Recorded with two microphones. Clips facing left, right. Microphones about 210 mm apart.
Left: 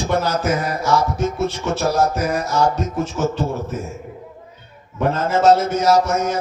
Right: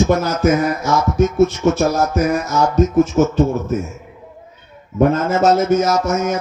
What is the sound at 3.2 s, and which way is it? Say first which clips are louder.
Speech: right 4 dB; 45° right (ahead or behind).